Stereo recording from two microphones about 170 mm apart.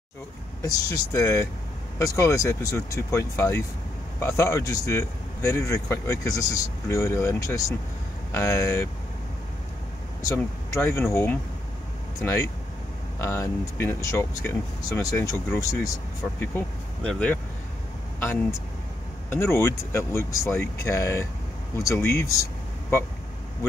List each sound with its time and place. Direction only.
0.6 s a man's voice: 20° left (ahead or behind)
10.3 s a man's voice: 15° left (ahead or behind)